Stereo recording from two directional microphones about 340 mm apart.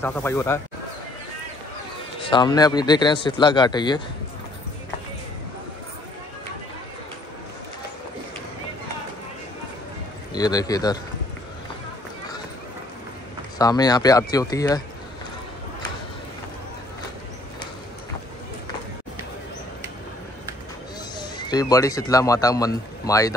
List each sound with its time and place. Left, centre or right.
0.0 s speech: centre
2.2 s speech: centre
10.3 s speech: centre
13.6 s speech: centre
21.2 s a man's voice: centre